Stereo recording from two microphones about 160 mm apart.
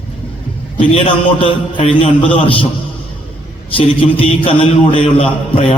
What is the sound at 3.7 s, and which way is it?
A man's voice, 35° left (ahead or behind).